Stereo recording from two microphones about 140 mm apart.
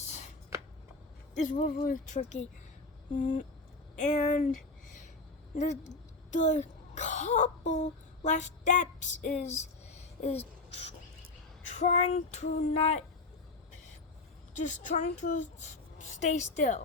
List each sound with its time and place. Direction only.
1.4 s speech: 65° left (ahead or behind)
5.5 s speech: 55° left (ahead or behind)
11.8 s female singing: 55° left (ahead or behind)
14.5 s a woman's voice: 65° left (ahead or behind)